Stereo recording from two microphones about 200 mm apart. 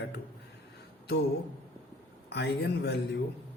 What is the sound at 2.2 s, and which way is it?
Speech, 55° left (ahead or behind).